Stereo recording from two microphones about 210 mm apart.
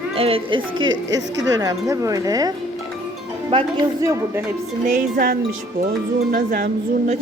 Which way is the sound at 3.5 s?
25° right (ahead or behind).